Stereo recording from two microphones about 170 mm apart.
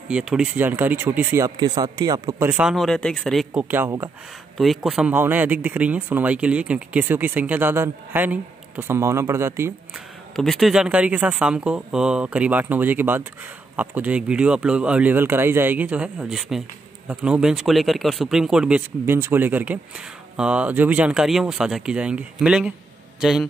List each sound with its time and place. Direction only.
0.1 s speech: 5° right (ahead or behind)
3.6 s speech: 15° right (ahead or behind)
4.6 s speech: centre (ahead or behind)
9.9 s speech: centre (ahead or behind)